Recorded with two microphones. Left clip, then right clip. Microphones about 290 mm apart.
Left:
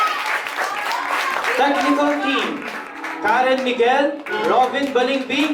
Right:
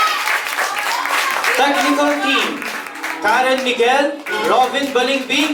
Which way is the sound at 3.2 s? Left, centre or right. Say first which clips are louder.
Right 2 dB; centre.